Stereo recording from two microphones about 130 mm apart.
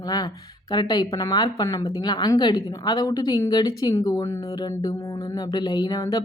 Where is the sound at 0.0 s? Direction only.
30° left (ahead or behind).